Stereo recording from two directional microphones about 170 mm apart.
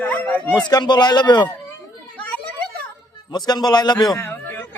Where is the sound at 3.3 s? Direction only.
25° left (ahead or behind).